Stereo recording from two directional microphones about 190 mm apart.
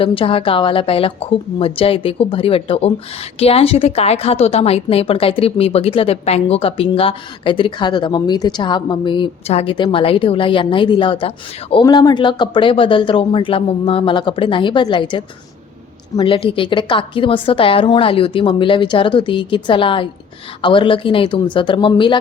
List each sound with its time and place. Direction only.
0.0 s a woman's voice: 30° left (ahead or behind)